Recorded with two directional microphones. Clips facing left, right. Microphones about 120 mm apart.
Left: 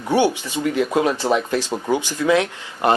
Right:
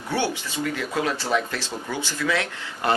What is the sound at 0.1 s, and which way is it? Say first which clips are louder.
Speech: left 8 dB; 15° left (ahead or behind).